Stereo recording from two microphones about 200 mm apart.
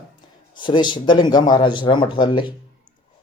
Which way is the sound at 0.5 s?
25° left (ahead or behind).